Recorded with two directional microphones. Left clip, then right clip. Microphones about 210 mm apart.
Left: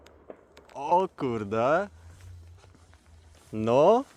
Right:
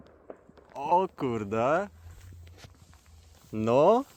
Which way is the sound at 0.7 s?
5° left (ahead or behind).